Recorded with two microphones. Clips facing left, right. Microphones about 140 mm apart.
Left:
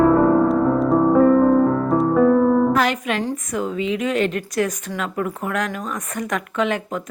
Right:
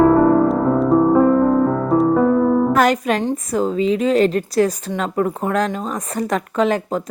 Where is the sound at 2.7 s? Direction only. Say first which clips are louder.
Right 4 dB; 40° right (ahead or behind).